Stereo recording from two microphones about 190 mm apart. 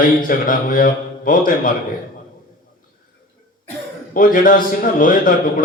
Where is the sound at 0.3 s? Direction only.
45° left (ahead or behind).